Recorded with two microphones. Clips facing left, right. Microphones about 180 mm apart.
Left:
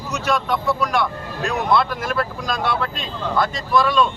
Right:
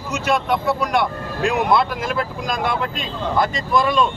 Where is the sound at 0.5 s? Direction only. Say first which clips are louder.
Right 1 dB; 20° right (ahead or behind).